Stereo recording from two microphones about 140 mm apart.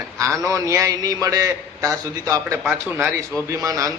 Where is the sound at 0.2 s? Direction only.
25° right (ahead or behind).